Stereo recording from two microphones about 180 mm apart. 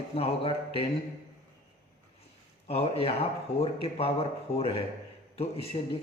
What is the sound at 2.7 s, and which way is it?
A man's voice, 35° left (ahead or behind).